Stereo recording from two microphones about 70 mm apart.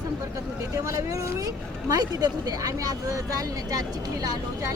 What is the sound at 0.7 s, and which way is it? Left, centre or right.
Speech, right.